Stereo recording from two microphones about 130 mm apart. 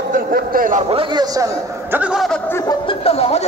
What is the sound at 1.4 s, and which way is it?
Speech, 15° right (ahead or behind).